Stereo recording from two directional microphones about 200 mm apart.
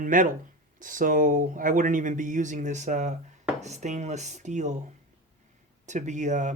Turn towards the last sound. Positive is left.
turn(degrees=-35)  # may be behind; listen again after turning